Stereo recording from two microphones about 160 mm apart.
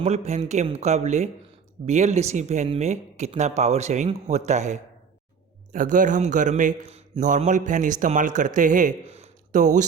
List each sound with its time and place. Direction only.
0.0 s a man's voice: 45° right (ahead or behind)